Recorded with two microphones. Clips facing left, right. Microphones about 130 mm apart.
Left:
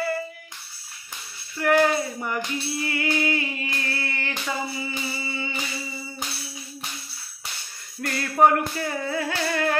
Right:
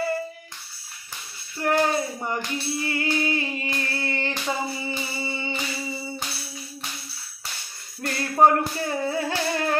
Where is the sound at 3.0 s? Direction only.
25° right (ahead or behind).